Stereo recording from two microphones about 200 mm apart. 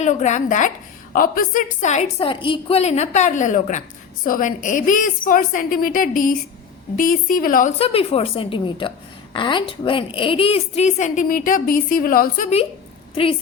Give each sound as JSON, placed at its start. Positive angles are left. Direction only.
{"t": 0.0, "sound": "a woman's voice", "side_deg": 35}
{"t": 7.8, "sound": "a woman's voice", "side_deg": 30}